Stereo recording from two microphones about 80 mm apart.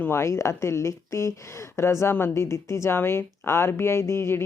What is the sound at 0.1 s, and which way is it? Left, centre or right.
A woman's voice, left.